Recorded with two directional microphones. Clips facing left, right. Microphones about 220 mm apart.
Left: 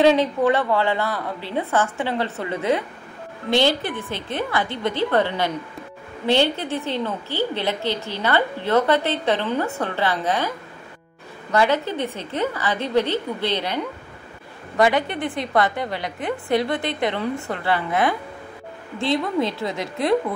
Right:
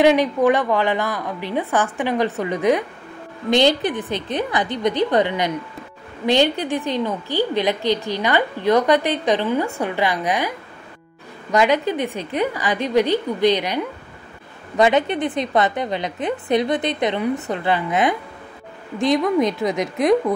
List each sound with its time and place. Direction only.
0.0 s a woman's voice: 15° right (ahead or behind)
11.5 s a woman's voice: 15° right (ahead or behind)
14.8 s a woman's voice: 20° right (ahead or behind)